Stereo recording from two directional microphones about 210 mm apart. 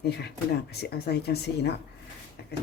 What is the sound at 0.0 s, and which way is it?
Speech, 50° left (ahead or behind).